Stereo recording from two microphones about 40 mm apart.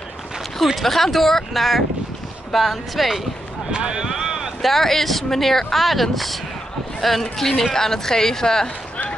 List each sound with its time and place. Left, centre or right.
0.8 s speech: centre
3.7 s speech: right
4.6 s a woman's voice: centre